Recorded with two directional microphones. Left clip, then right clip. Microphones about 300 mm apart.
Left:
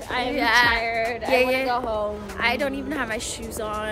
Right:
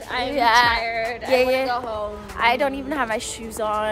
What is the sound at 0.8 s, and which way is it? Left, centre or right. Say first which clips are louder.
Speech: even; centre.